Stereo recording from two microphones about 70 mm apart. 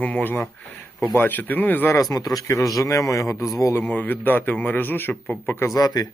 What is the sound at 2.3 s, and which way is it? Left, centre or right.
A man's voice, left.